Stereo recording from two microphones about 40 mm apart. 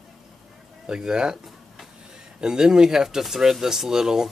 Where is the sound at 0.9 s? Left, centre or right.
Right.